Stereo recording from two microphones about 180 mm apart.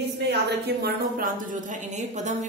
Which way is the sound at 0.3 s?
65° right (ahead or behind).